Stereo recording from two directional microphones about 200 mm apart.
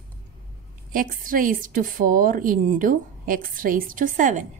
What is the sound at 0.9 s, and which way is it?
A woman's voice, 45° right (ahead or behind).